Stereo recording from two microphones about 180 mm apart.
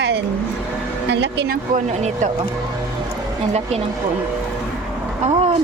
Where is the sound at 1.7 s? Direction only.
40° right (ahead or behind).